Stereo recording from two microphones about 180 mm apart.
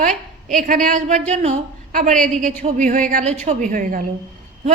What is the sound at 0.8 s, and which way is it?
A woman's voice, 40° right (ahead or behind).